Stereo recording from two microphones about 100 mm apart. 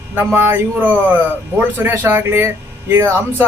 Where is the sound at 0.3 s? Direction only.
20° right (ahead or behind).